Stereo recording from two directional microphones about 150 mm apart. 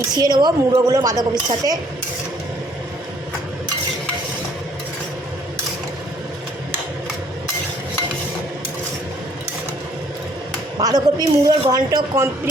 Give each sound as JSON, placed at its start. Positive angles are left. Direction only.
{"t": 0.2, "sound": "a woman's voice", "side_deg": -30}
{"t": 10.8, "sound": "a woman's voice", "side_deg": -25}